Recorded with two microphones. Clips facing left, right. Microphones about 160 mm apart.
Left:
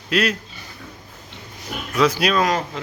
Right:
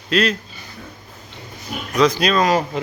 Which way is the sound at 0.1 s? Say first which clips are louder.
Right 2 dB; 10° left (ahead or behind).